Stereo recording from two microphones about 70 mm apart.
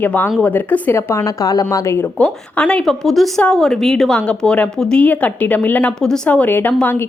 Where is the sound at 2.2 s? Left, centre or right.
Centre.